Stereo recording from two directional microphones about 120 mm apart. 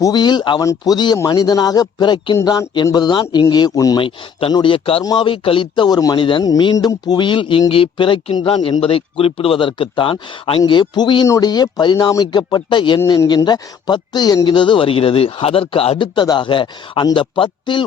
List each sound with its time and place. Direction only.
0.0 s speech: 35° left (ahead or behind)
0.6 s speech: 30° left (ahead or behind)
4.0 s speech: 50° left (ahead or behind); by 6.1 s 35° left (ahead or behind)
6.1 s speech: 45° left (ahead or behind)